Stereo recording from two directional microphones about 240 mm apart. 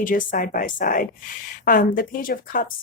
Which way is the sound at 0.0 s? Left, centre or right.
Left.